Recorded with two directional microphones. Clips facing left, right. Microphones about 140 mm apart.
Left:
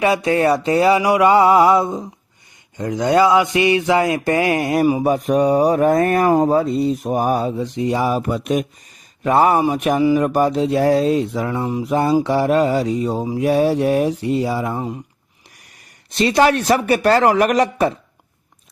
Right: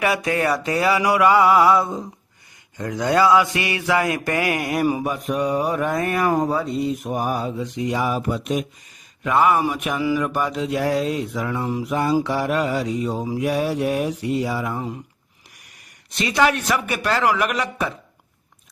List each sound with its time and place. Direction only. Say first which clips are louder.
0.0 s mantra: left 5 dB; 25° left (ahead or behind)
5.0 s mantra: left 7 dB; 40° left (ahead or behind)
8.3 s speech: left 4 dB; 55° left (ahead or behind)
9.2 s mantra: left 4 dB; 35° left (ahead or behind)
16.0 s mantra: left 5 dB; 30° left (ahead or behind)